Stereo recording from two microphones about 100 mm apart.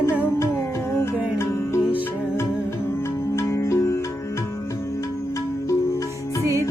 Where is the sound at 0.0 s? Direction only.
25° left (ahead or behind).